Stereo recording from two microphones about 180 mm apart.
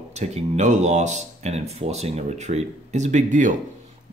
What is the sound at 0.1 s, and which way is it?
Speech, 40° right (ahead or behind).